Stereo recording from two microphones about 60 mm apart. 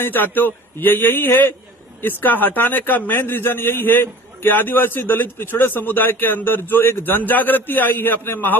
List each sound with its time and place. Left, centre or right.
0.0 s a man's voice: left